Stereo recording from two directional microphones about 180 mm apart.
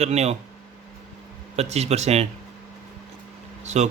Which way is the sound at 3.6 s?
40° right (ahead or behind).